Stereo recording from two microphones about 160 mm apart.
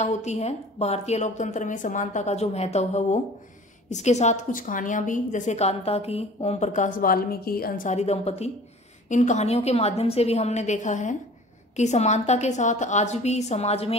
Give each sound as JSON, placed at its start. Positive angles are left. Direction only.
{"t": 0.0, "sound": "a woman's voice", "side_deg": 45}